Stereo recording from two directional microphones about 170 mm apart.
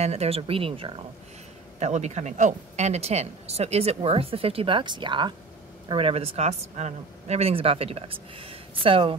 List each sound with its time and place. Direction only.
0.0 s speech: 40° right (ahead or behind)
1.8 s speech: 40° right (ahead or behind)